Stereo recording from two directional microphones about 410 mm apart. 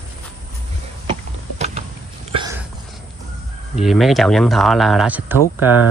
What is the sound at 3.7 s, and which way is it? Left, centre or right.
Speech, centre.